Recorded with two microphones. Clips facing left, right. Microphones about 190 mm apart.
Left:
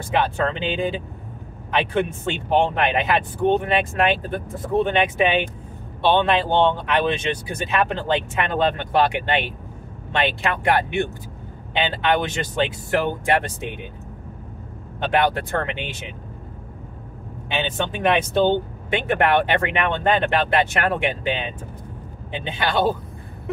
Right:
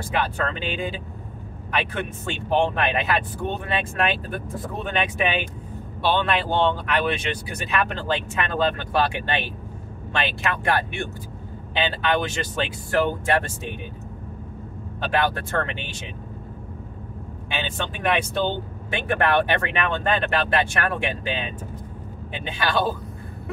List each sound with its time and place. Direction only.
0.1 s speech: 25° left (ahead or behind)
2.0 s speech: 20° left (ahead or behind)
15.0 s speech: 20° left (ahead or behind)
17.5 s speech: 20° left (ahead or behind)